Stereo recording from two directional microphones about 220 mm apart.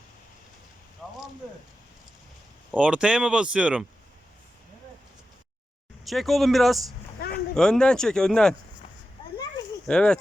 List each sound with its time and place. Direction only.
1.0 s a sound: 5° left (ahead or behind)
2.7 s speech: 5° right (ahead or behind)
6.1 s speech: centre (ahead or behind)
9.8 s speech: 5° left (ahead or behind)